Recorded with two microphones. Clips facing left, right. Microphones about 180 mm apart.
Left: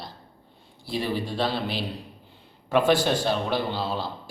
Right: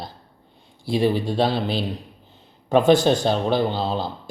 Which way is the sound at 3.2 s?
25° right (ahead or behind).